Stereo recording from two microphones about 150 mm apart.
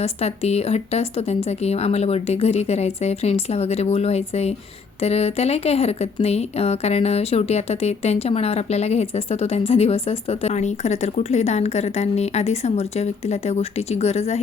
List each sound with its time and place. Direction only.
0.0 s speech: 45° left (ahead or behind)